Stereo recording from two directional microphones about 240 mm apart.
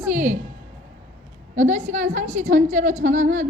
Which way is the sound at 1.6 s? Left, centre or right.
Right.